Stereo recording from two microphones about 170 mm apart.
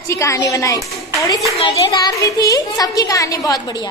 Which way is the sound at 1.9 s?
20° left (ahead or behind).